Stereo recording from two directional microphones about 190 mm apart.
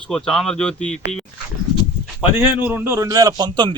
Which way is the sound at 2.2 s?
10° right (ahead or behind).